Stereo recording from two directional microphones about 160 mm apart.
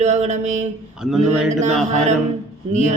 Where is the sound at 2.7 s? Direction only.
50° right (ahead or behind).